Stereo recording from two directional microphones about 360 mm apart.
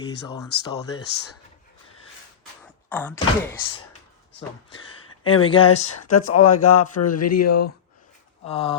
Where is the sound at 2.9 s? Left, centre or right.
Centre.